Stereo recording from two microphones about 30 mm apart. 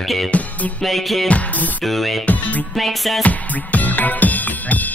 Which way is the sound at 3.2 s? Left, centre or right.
Left.